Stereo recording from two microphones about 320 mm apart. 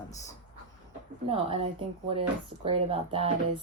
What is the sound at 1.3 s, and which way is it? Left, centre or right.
Speech, centre.